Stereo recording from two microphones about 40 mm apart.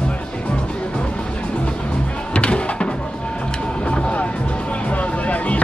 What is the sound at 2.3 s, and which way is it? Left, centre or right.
Music, left.